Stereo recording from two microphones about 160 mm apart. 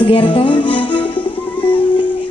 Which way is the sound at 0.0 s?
35° left (ahead or behind).